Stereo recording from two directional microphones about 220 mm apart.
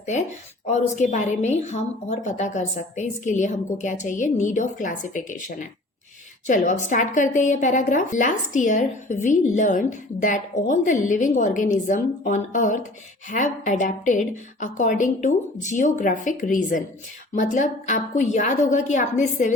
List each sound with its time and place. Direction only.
0.7 s a woman's voice: 30° left (ahead or behind)